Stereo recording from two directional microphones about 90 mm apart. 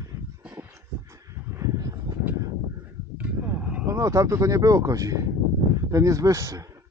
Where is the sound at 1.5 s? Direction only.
35° right (ahead or behind).